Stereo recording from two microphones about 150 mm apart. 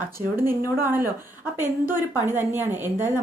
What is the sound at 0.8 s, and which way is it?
A woman's voice, 15° right (ahead or behind).